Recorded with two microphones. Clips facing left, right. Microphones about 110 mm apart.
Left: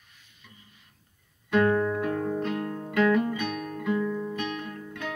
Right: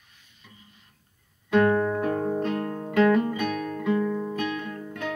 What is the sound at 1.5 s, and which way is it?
Music, 30° right (ahead or behind).